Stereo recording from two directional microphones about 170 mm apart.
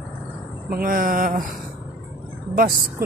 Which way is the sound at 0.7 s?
55° right (ahead or behind).